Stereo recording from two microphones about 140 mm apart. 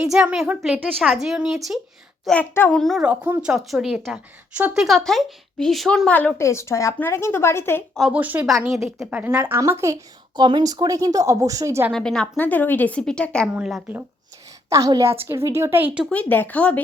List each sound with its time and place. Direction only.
0.0 s a woman's voice: 5° right (ahead or behind)
0.9 s a woman's voice: centre (ahead or behind)
2.2 s a woman's voice: 10° left (ahead or behind)
7.9 s speech: 5° right (ahead or behind)
8.7 s a woman's voice: centre (ahead or behind)
9.0 s speech: 10° right (ahead or behind)
11.9 s a woman's voice: 5° left (ahead or behind)
13.5 s a woman's voice: 5° right (ahead or behind)
14.7 s speech: 25° right (ahead or behind)
16.0 s a woman's voice: 10° left (ahead or behind)